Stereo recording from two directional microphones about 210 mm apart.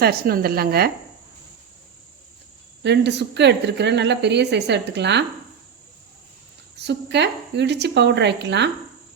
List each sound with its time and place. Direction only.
0.0 s a woman's voice: 45° right (ahead or behind)
2.8 s a woman's voice: 55° right (ahead or behind)
6.7 s a woman's voice: 55° right (ahead or behind)